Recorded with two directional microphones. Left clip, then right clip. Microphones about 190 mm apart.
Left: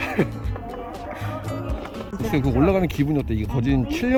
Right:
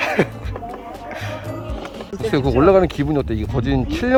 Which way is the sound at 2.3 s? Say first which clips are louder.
Right 7 dB; 5° right (ahead or behind).